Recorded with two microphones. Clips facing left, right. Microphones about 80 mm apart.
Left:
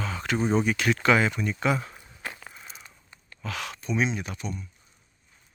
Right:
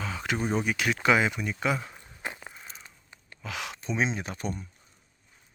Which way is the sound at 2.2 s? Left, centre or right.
Right.